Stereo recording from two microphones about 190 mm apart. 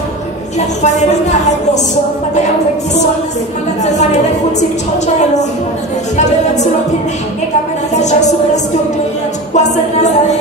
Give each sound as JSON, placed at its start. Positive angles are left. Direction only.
{"t": 0.8, "sound": "a woman's voice", "side_deg": 40}
{"t": 4.6, "sound": "a woman's voice", "side_deg": 40}
{"t": 7.9, "sound": "a woman's voice", "side_deg": 40}
{"t": 9.5, "sound": "a woman's voice", "side_deg": 40}